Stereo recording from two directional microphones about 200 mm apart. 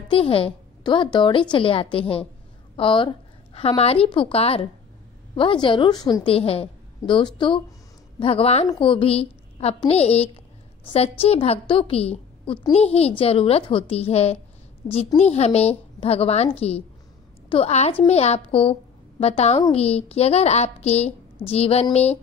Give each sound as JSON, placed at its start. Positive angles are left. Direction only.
{"t": 0.1, "sound": "a woman's voice", "side_deg": 30}